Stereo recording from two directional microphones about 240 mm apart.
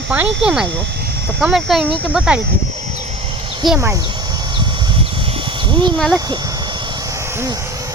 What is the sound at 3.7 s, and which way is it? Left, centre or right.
Speech, centre.